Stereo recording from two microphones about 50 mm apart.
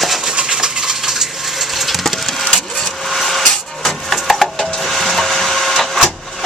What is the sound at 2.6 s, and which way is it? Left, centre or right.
Printer, centre.